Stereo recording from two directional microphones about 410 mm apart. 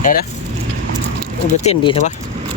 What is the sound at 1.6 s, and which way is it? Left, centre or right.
Speech, centre.